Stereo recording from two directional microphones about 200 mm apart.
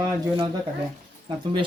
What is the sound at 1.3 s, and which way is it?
Speech, 25° right (ahead or behind).